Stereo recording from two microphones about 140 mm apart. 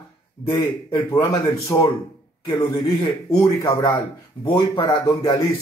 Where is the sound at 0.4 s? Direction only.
20° left (ahead or behind).